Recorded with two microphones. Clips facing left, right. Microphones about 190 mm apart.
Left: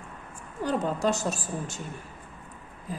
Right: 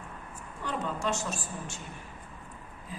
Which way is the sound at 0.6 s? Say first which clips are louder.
Left 7 dB; 40° left (ahead or behind).